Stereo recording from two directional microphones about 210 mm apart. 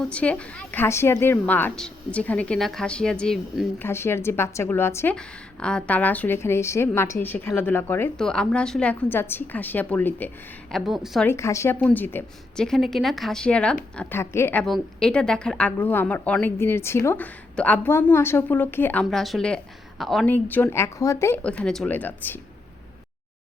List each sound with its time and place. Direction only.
0.0 s a woman's voice: 5° left (ahead or behind)
11.3 s a woman's voice: 15° left (ahead or behind)